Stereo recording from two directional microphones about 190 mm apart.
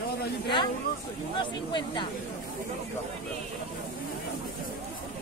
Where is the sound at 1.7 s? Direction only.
25° left (ahead or behind).